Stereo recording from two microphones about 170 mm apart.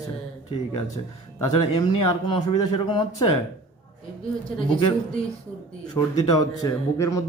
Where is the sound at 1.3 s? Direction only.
20° left (ahead or behind).